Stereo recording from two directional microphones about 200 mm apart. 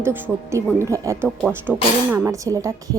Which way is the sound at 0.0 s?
10° right (ahead or behind).